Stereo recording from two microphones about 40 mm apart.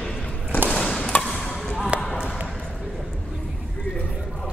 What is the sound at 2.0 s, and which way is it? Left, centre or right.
Basketball bounce, left.